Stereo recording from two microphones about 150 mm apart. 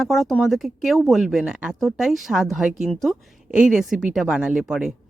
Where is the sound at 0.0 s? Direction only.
Centre (ahead or behind).